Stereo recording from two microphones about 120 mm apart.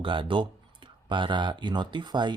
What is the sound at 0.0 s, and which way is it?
Speech, 45° right (ahead or behind).